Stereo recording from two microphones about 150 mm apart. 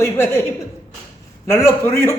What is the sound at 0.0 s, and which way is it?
Speech, 15° left (ahead or behind).